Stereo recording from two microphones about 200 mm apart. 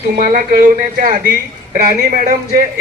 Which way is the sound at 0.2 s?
40° right (ahead or behind).